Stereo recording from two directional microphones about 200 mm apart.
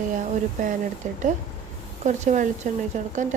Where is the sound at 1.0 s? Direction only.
40° right (ahead or behind).